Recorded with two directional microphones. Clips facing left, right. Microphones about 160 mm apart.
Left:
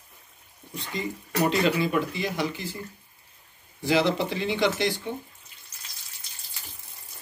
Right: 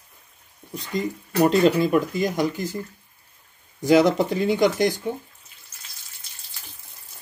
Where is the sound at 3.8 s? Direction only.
45° right (ahead or behind).